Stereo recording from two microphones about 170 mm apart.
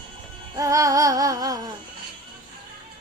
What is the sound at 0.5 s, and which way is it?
Music, 20° right (ahead or behind).